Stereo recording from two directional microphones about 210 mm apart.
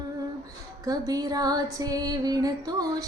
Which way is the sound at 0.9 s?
15° right (ahead or behind).